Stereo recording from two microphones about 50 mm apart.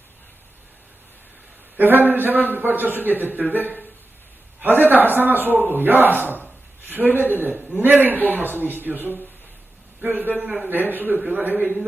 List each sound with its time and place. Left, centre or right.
1.7 s a man's voice: right
4.6 s a man's voice: right